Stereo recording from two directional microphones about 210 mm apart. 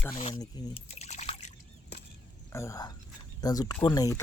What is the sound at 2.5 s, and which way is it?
Speech, 15° left (ahead or behind).